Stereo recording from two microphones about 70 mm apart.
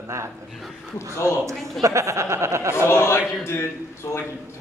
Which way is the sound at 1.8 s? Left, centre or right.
Right.